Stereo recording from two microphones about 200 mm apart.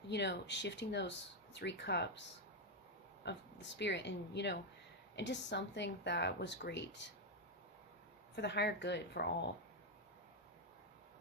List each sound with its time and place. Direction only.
0.1 s speech: 60° left (ahead or behind)
3.2 s speech: 60° left (ahead or behind)
8.4 s speech: 60° left (ahead or behind)